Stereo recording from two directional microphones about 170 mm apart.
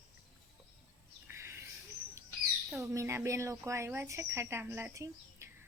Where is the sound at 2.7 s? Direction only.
15° right (ahead or behind).